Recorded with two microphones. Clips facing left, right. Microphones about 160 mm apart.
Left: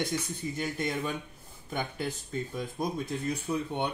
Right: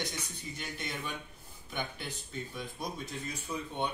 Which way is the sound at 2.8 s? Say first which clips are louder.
Left 8 dB; 45° left (ahead or behind).